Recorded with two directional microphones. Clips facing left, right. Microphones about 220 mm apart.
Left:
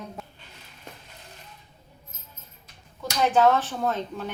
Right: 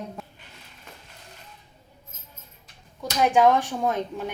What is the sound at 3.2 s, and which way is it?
Speech, 15° right (ahead or behind).